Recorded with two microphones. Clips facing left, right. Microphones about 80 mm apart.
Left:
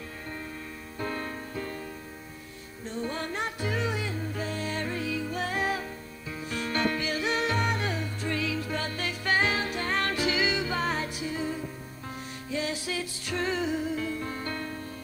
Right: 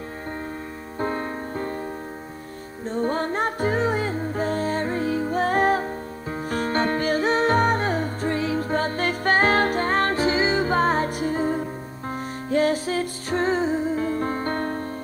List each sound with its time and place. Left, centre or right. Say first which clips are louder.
0.9 s music: right 7 dB; right
2.8 s music: right 9 dB; right